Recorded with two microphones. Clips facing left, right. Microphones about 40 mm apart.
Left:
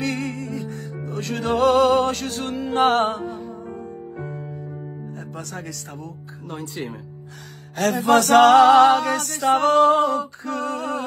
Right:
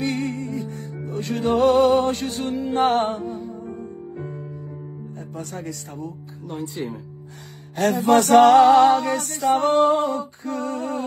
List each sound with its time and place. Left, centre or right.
0.0 s music: left
4.3 s music: left
5.3 s speech: left
7.8 s music: left